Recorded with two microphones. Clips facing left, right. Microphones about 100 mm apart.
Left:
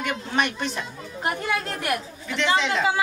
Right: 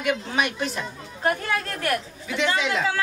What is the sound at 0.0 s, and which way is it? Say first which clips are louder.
Speech: right 1 dB; 5° right (ahead or behind).